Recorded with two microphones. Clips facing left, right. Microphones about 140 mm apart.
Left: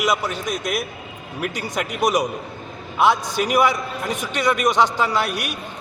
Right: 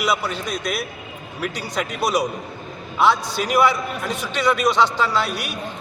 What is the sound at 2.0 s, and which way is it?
A man's voice, 20° left (ahead or behind).